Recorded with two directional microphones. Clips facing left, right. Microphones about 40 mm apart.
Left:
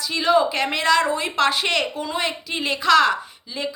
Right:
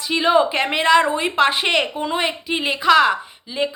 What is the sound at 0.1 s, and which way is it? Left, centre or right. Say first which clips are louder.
A woman's voice: right 2 dB; right.